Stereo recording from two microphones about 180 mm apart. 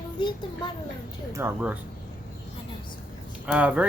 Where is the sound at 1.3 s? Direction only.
15° right (ahead or behind).